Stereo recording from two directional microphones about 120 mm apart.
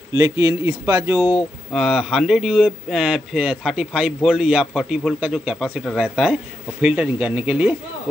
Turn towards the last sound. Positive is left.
turn(degrees=-10)  # may be behind; listen again after turning